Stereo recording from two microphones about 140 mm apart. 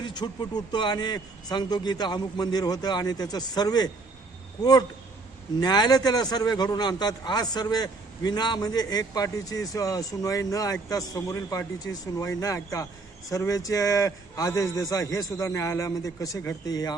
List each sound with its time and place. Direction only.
0.0 s a man's voice: 30° left (ahead or behind)
5.5 s a man's voice: 30° left (ahead or behind)